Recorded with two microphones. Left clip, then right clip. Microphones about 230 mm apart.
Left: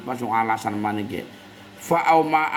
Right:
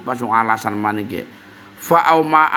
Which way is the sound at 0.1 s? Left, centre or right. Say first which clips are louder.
Right 6 dB; right.